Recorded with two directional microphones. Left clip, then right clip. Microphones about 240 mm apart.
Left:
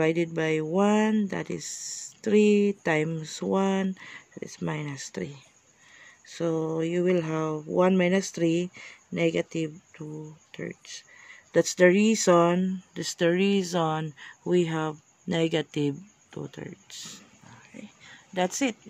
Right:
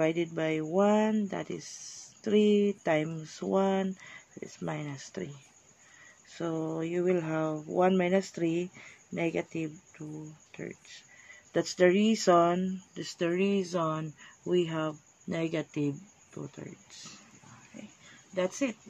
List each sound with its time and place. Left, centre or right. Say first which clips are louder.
0.0 s speech: left 4 dB; left
6.2 s speech: left 6 dB; left
18.3 s speech: left 4 dB; left